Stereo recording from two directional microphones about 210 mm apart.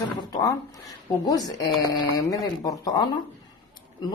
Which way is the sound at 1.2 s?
20° left (ahead or behind).